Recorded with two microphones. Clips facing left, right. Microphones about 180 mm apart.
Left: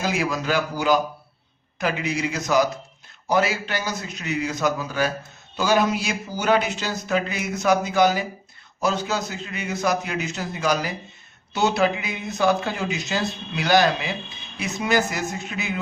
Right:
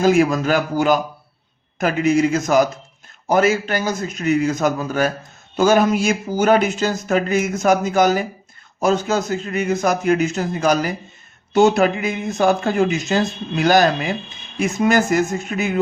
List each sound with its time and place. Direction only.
0.0 s speech: 50° right (ahead or behind)